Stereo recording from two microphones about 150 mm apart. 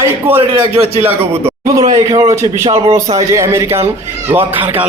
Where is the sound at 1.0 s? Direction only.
15° right (ahead or behind).